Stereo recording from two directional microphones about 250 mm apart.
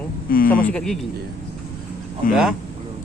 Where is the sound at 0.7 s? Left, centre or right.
Centre.